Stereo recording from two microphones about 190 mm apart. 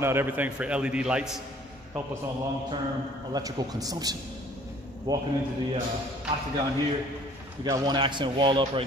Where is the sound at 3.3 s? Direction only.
20° right (ahead or behind).